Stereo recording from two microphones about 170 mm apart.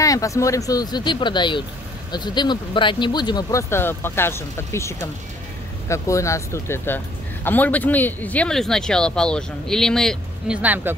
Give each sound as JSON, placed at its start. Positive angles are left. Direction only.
{"t": 0.0, "sound": "speech", "side_deg": 20}
{"t": 10.6, "sound": "speech", "side_deg": -10}